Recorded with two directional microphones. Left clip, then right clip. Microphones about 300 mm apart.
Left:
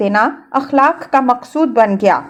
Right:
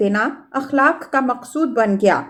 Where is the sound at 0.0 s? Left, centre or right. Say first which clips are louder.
Left 5 dB; centre.